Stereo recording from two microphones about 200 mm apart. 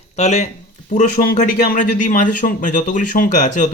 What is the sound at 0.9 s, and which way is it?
A man's voice, 45° left (ahead or behind).